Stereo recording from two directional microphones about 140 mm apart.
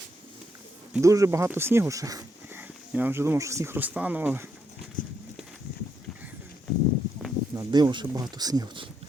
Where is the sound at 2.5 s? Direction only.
10° right (ahead or behind).